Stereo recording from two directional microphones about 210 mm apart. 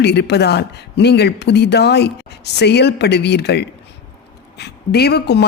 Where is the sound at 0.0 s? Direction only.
55° left (ahead or behind).